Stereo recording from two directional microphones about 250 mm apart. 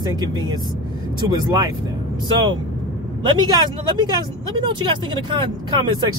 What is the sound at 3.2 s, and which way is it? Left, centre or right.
Speech, centre.